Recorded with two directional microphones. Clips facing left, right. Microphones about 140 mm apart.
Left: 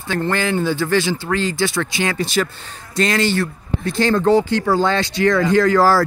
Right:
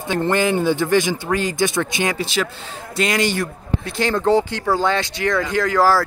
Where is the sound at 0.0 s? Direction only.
20° right (ahead or behind).